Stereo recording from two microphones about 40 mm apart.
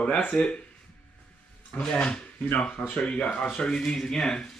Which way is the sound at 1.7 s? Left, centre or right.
Left.